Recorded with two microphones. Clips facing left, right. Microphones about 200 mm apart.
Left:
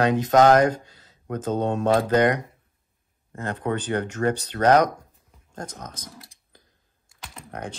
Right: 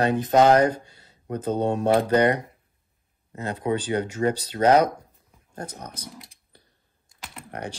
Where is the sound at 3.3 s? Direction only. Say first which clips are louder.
Right 1 dB; 10° right (ahead or behind).